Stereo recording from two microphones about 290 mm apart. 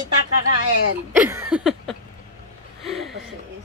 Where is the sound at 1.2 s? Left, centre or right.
Centre.